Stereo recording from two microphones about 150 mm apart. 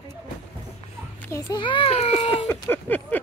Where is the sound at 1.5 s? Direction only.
35° left (ahead or behind).